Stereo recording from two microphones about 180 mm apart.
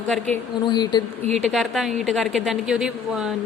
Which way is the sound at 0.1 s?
Centre (ahead or behind).